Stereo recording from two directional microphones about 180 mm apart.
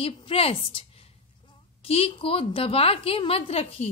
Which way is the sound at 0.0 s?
30° left (ahead or behind).